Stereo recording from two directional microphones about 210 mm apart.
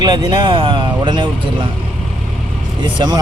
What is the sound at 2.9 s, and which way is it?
Speech, 20° right (ahead or behind).